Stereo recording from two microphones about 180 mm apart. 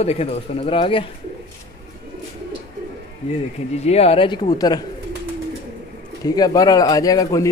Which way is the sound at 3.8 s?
35° left (ahead or behind).